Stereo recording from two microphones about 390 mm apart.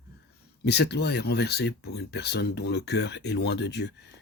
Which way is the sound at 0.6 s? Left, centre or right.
Left.